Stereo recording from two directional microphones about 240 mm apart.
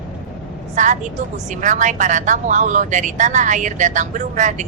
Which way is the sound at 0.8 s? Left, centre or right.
Right.